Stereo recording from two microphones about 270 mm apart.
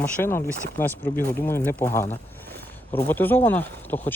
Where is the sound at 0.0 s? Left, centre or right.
Centre.